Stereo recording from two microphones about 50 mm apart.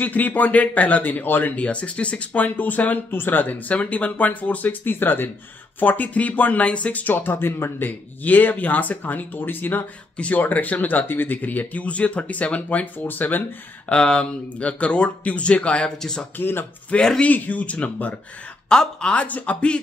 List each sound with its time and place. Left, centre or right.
0.0 s speech: left
5.8 s speech: left
8.2 s speech: left
10.1 s speech: left
13.0 s speech: left
13.8 s speech: centre
16.3 s speech: left
17.2 s speech: left
18.7 s speech: centre